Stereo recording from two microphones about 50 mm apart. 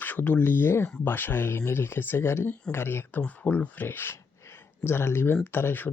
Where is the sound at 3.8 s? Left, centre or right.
Left.